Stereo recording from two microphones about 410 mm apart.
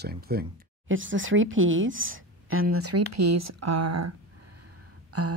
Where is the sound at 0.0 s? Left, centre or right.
Right.